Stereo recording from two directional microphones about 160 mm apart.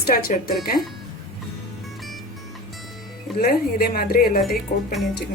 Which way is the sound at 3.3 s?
70° left (ahead or behind).